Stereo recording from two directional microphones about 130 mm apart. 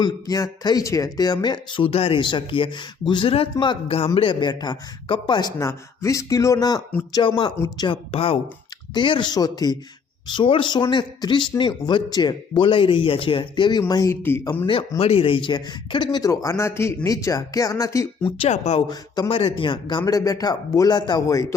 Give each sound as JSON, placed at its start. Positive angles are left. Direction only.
{"t": 0.0, "sound": "speech", "side_deg": 30}
{"t": 7.1, "sound": "speech", "side_deg": 40}
{"t": 14.7, "sound": "speech", "side_deg": 45}
{"t": 18.3, "sound": "speech", "side_deg": 50}
{"t": 18.9, "sound": "speech", "side_deg": 30}
{"t": 19.3, "sound": "speech", "side_deg": 45}